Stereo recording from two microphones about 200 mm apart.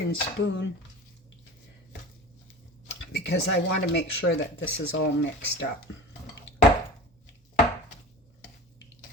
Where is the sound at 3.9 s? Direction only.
60° left (ahead or behind).